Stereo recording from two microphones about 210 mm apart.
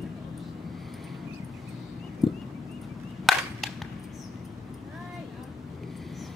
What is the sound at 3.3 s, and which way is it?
Cap gun, centre (ahead or behind).